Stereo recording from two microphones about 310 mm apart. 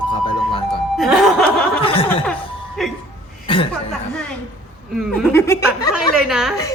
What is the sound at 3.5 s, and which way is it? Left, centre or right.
Speech, centre.